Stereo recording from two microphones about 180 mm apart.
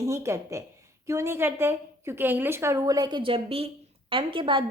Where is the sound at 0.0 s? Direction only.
15° right (ahead or behind).